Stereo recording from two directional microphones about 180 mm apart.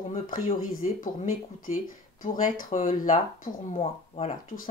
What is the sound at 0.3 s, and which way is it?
Speech, 50° left (ahead or behind).